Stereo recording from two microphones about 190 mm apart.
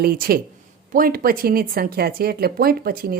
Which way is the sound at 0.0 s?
50° right (ahead or behind).